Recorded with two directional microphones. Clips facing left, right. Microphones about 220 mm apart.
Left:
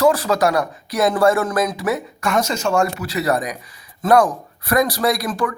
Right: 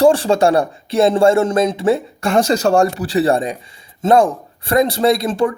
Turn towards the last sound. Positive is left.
turn(degrees=-25)  # may be behind; listen again after turning